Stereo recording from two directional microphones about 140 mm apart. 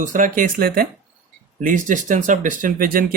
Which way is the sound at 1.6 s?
70° right (ahead or behind).